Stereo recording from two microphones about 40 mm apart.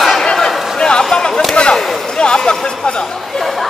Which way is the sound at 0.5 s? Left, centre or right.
Centre.